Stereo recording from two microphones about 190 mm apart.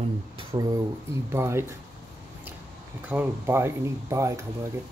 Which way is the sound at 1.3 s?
15° right (ahead or behind).